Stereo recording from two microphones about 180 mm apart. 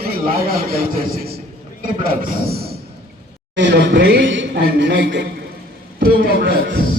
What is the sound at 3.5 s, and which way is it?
A man's voice, 85° right.